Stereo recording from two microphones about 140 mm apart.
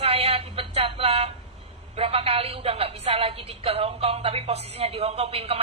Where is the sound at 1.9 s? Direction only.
45° right (ahead or behind).